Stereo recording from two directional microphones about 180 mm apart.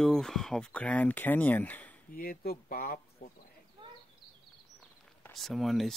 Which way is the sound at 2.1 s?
55° left (ahead or behind).